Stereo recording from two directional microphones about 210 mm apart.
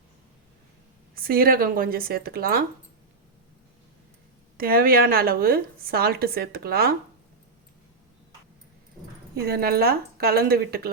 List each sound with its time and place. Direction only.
1.1 s a woman's voice: 45° right (ahead or behind)
4.5 s a woman's voice: 45° right (ahead or behind)
9.3 s a woman's voice: 50° right (ahead or behind)